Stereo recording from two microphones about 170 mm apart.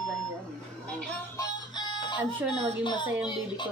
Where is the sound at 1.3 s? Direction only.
25° left (ahead or behind).